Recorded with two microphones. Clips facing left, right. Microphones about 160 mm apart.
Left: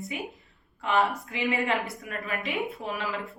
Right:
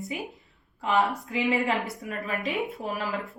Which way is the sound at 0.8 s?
35° right (ahead or behind).